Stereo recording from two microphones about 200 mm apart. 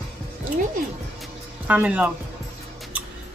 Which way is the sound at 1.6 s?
5° right (ahead or behind).